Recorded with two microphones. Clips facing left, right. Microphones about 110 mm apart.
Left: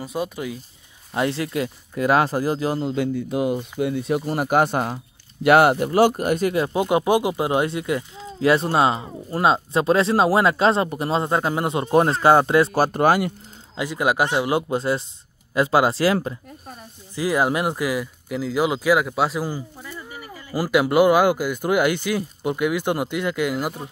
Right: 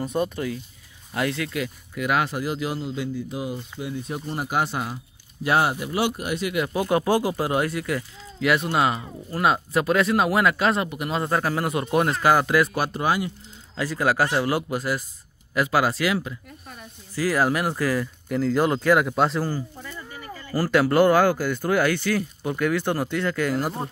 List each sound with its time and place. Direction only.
0.0 s speech: 5° left (ahead or behind)
1.1 s speech: 25° left (ahead or behind); by 3.6 s 65° left (ahead or behind)
3.8 s speech: 75° left (ahead or behind)
4.5 s speech: 50° left (ahead or behind)
6.5 s speech: 30° left (ahead or behind)
12.9 s speech: 55° left (ahead or behind)
13.7 s speech: 20° left (ahead or behind)
17.1 s speech: 20° left (ahead or behind)